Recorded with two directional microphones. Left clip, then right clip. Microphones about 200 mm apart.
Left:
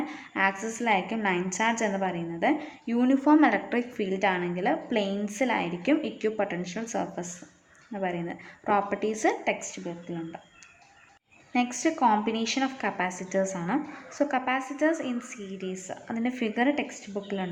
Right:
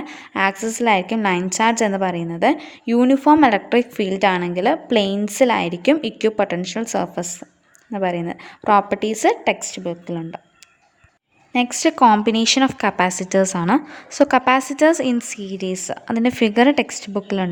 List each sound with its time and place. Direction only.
0.0 s a woman's voice: 45° right (ahead or behind)
11.5 s a woman's voice: 45° right (ahead or behind)